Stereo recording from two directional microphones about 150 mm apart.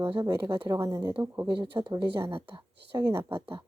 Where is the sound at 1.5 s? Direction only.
30° right (ahead or behind).